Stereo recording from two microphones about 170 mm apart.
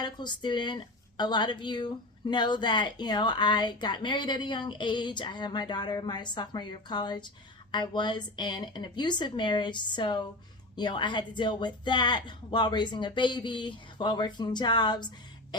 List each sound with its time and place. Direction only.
0.0 s speech: 25° left (ahead or behind)